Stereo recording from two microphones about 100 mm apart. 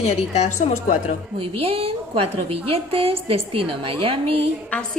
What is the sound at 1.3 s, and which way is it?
A woman's voice, 70° right (ahead or behind).